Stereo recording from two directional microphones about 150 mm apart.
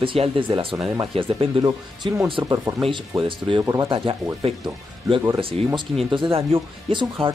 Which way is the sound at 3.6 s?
20° right (ahead or behind).